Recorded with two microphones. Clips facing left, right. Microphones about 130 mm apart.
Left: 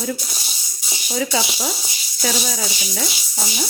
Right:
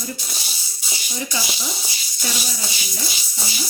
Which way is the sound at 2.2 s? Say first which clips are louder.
Left 6 dB; 90° left.